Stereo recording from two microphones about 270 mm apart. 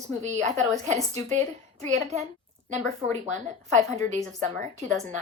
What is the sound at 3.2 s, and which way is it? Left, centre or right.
A woman's voice, right.